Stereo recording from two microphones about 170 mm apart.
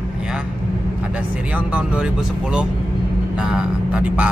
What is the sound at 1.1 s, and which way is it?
Speech, 10° right (ahead or behind).